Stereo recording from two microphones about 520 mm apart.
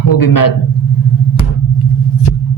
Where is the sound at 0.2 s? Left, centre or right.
Left.